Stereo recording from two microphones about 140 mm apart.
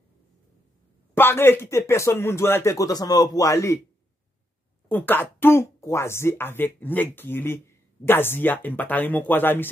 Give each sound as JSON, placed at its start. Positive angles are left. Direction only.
{"t": 1.1, "sound": "speech", "side_deg": 15}
{"t": 4.8, "sound": "speech", "side_deg": 15}